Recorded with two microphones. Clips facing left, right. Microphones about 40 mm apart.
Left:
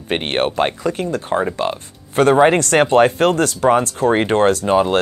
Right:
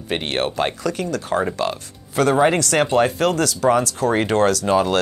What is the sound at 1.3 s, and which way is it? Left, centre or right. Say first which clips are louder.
Speech: left 2 dB; centre.